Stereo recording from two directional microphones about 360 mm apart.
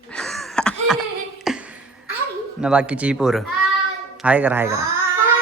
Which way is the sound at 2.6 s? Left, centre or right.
Centre.